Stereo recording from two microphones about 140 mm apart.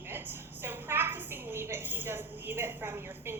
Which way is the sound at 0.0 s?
15° right (ahead or behind).